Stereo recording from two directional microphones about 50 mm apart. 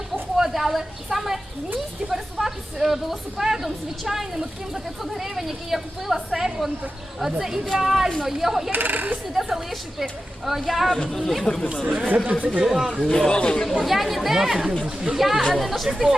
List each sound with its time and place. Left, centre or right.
0.3 s a woman's voice: centre
8.7 s speech: right
9.3 s a woman's voice: centre
13.7 s a woman's voice: centre